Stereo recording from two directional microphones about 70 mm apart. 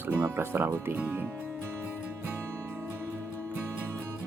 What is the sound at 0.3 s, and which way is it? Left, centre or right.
Speech, right.